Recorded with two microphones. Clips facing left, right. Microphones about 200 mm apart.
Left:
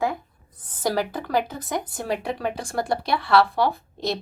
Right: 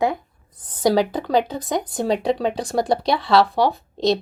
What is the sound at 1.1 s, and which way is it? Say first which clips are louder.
Speech: right 5 dB; 20° right (ahead or behind).